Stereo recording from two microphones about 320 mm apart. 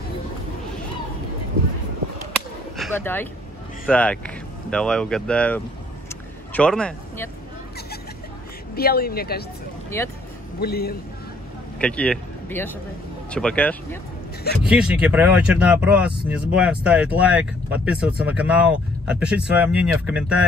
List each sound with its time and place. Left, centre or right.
2.8 s speech: centre
6.0 s vehicle: centre
8.7 s speech: left
9.9 s speech: centre
10.6 s speech: left
11.8 s speech: centre